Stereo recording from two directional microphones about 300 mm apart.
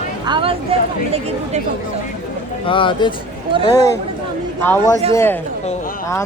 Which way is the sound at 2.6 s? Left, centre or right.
Centre.